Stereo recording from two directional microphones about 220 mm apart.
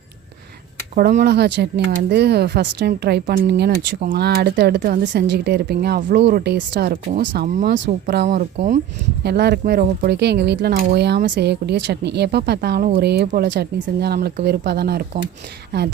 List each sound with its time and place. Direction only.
0.9 s speech: 45° right (ahead or behind)
7.4 s speech: 35° right (ahead or behind)
7.7 s speech: 50° right (ahead or behind)